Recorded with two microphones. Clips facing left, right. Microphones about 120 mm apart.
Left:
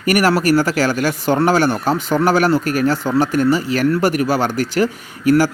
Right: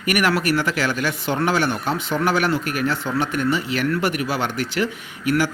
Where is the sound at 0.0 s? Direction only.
35° left (ahead or behind).